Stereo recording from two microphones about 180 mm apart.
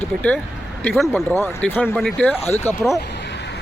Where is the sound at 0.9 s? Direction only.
5° left (ahead or behind).